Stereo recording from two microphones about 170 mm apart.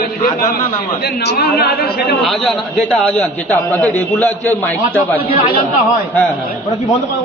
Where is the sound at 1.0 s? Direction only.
70° left (ahead or behind).